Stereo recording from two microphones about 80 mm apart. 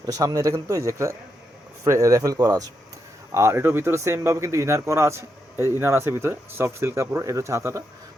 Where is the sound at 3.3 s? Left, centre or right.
Right.